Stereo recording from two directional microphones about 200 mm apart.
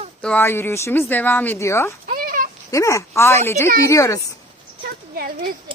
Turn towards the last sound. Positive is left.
turn(degrees=-50)  # may be behind; listen again after turning